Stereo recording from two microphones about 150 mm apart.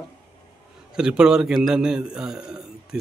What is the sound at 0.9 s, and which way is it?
A man's voice, 5° right (ahead or behind).